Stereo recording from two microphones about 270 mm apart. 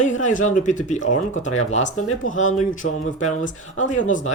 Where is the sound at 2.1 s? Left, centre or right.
Left.